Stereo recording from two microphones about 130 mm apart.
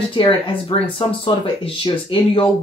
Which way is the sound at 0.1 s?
40° left (ahead or behind).